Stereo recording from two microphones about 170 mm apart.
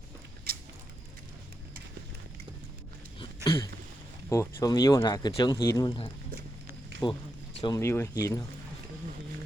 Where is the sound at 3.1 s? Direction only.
25° left (ahead or behind).